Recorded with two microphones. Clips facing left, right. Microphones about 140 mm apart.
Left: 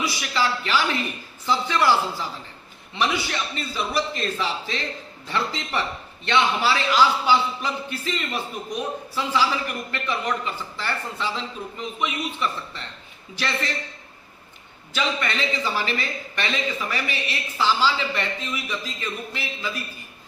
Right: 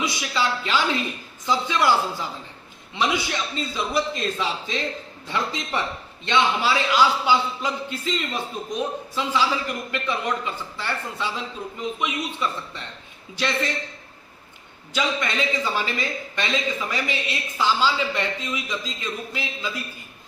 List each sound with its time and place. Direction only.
0.0 s a man's voice: 20° right (ahead or behind)
14.9 s a man's voice: 15° right (ahead or behind)